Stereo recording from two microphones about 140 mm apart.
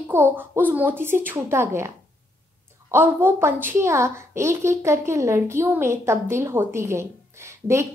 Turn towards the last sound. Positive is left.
turn(degrees=-20)  # may be behind; listen again after turning